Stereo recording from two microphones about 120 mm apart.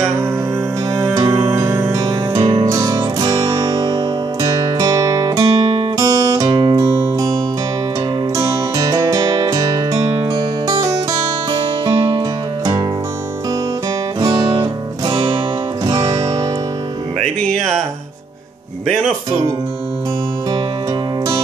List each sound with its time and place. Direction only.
0.9 s music: 25° right (ahead or behind)
2.0 s music: 35° right (ahead or behind)
6.8 s music: 30° right (ahead or behind)
8.4 s music: 30° right (ahead or behind)
14.2 s music: 40° right (ahead or behind)
17.6 s music: 5° left (ahead or behind)